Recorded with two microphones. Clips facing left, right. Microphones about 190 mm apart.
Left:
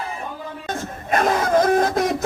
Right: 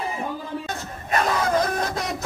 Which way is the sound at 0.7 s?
50° left (ahead or behind).